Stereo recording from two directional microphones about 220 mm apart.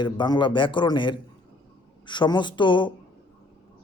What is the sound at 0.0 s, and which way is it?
A man's voice, 20° left (ahead or behind).